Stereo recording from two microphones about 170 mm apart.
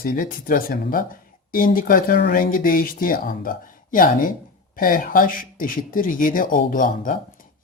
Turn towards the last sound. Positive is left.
turn(degrees=50)  # may be behind; listen again after turning